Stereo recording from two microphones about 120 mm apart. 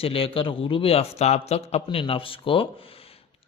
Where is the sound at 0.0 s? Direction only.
50° left (ahead or behind).